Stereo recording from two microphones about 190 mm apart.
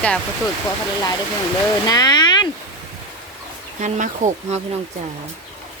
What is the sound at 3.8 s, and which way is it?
Speech, 40° right (ahead or behind).